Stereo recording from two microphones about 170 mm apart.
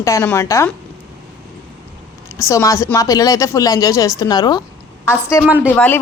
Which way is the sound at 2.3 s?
20° left (ahead or behind).